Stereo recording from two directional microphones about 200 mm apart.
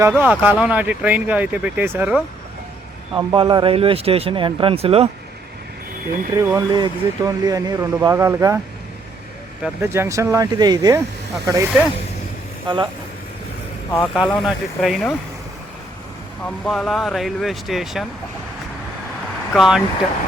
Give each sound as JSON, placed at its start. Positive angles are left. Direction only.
{"t": 0.0, "sound": "speech", "side_deg": -10}
{"t": 3.2, "sound": "speech", "side_deg": -20}
{"t": 6.3, "sound": "speech", "side_deg": -15}
{"t": 9.6, "sound": "speech", "side_deg": -10}
{"t": 14.0, "sound": "speech", "side_deg": 0}
{"t": 16.5, "sound": "speech", "side_deg": 0}
{"t": 19.5, "sound": "speech", "side_deg": 0}